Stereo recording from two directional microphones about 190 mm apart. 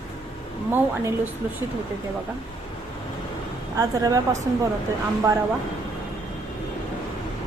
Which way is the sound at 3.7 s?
20° right (ahead or behind).